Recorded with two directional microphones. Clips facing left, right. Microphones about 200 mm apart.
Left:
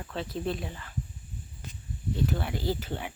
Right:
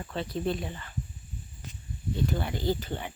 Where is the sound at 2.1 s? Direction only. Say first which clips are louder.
Even; centre (ahead or behind).